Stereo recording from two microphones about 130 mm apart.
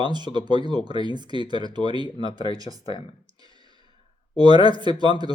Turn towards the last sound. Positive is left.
turn(degrees=-35)  # may be behind; listen again after turning